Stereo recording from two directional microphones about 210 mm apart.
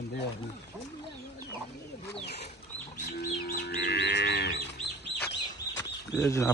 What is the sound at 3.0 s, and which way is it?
Moo, 45° left (ahead or behind).